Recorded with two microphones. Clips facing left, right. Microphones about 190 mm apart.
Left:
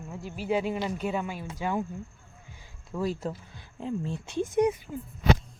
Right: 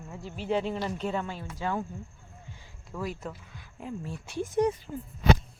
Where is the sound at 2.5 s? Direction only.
15° left (ahead or behind).